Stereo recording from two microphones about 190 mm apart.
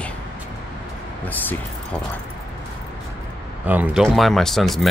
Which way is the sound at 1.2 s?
10° left (ahead or behind).